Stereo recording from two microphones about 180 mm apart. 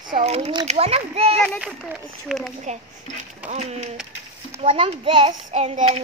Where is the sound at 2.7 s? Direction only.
40° right (ahead or behind).